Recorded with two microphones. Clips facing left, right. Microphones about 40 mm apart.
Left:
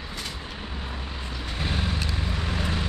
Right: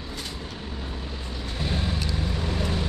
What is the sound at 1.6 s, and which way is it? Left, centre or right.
Vehicle, left.